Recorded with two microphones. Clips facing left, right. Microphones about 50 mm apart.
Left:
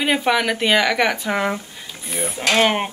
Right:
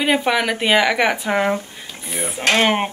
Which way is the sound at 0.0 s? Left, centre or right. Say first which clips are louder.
Right 1 dB; centre.